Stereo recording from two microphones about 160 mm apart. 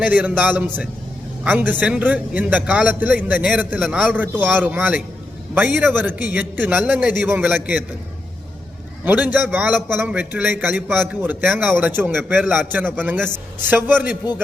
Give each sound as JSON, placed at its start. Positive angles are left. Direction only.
{"t": 0.0, "sound": "a man's voice", "side_deg": -10}
{"t": 9.0, "sound": "a man's voice", "side_deg": -10}